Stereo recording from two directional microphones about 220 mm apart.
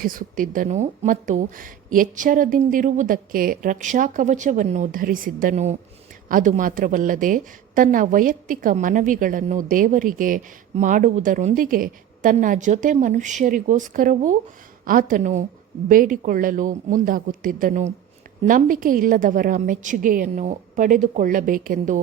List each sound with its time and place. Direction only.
0.0 s a woman's voice: 40° right (ahead or behind)